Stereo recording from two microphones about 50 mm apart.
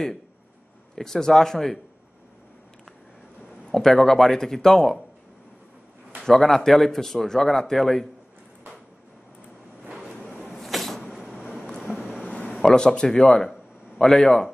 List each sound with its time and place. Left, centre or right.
0.9 s speech: centre
3.6 s speech: centre
6.2 s speech: centre
10.5 s a sound: centre
12.2 s a sound: left
12.6 s speech: centre